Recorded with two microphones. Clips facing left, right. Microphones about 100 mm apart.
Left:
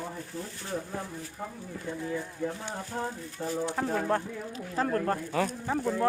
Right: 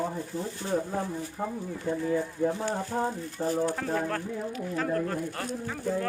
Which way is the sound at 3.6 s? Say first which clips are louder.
Right 1 dB; 20° left (ahead or behind).